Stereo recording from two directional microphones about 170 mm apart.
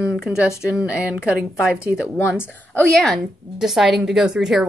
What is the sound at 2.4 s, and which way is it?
A woman's voice, 10° left (ahead or behind).